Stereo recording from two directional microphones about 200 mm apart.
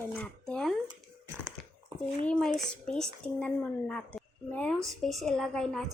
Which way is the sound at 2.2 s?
5° left (ahead or behind).